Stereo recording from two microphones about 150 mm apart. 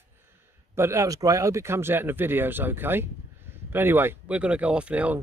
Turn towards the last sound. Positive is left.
turn(degrees=-10)  # may be behind; listen again after turning